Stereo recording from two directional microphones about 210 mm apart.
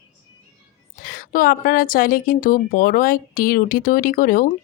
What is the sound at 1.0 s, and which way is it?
A woman's voice, 45° left (ahead or behind).